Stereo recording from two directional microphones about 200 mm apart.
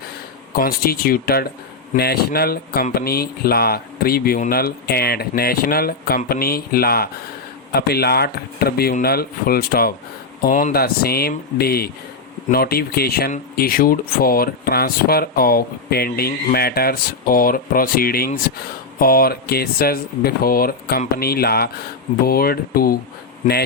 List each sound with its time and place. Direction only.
0.5 s speech: 50° left (ahead or behind)